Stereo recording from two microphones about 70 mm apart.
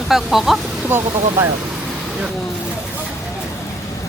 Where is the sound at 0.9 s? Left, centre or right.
Right.